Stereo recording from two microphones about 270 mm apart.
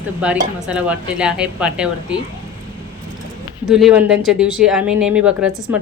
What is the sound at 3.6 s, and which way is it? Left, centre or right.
Speech, centre.